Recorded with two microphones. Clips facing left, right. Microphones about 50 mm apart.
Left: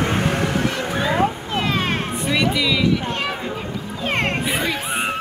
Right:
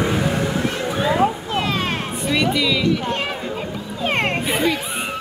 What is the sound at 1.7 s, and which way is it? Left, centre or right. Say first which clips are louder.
Music: left 1 dB; left.